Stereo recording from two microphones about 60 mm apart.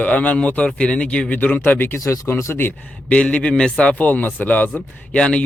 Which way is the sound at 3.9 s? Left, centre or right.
Left.